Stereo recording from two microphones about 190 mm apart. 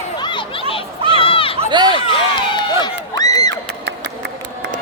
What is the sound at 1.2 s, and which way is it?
Run, 30° left (ahead or behind).